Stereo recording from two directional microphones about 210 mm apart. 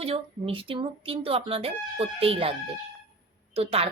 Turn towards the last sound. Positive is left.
turn(degrees=-30)  # may be behind; listen again after turning